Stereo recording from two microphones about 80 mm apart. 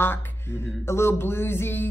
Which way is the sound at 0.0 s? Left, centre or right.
Left.